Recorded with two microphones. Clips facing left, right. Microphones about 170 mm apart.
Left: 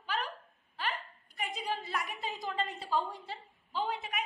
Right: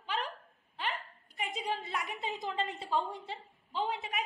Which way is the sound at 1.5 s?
20° right (ahead or behind).